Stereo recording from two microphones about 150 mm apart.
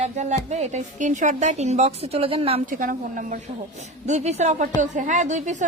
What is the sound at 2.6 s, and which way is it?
Speech, 60° right (ahead or behind).